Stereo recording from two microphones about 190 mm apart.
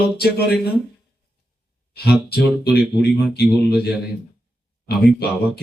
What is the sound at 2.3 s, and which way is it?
Speech, 55° left (ahead or behind).